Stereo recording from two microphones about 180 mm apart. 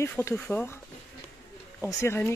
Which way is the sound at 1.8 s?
15° left (ahead or behind).